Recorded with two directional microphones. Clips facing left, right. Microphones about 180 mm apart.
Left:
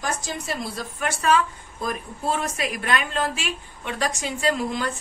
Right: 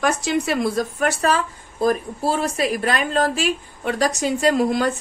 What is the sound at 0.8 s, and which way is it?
Speech, 40° right (ahead or behind).